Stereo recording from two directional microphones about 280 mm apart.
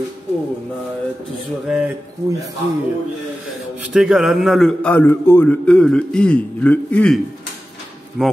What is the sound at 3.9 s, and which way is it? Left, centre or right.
A man's voice, centre.